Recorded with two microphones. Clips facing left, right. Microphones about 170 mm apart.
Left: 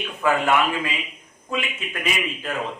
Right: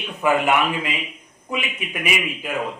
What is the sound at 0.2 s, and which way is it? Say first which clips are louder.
A man's voice: right 1 dB; 15° right (ahead or behind).